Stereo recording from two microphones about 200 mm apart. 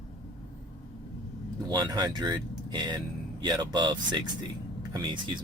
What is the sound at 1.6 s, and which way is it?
Speech, 20° right (ahead or behind).